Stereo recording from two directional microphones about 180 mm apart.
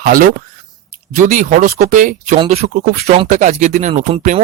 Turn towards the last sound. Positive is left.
turn(degrees=-35)  # may be behind; listen again after turning